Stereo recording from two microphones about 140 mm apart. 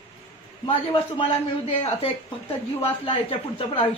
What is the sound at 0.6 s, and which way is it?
Speech, 40° left (ahead or behind).